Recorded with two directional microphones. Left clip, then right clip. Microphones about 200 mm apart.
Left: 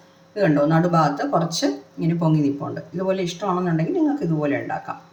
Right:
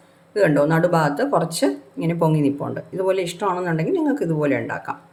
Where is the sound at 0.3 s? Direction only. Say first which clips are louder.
Right 2 dB; 55° right (ahead or behind).